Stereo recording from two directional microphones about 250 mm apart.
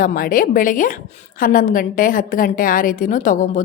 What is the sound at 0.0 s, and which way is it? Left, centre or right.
A woman's voice, left.